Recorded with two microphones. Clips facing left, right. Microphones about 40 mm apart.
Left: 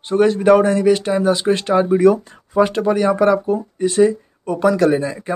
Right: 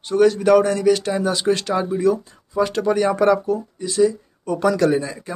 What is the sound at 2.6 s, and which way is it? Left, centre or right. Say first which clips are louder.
Speech: left 3 dB; left.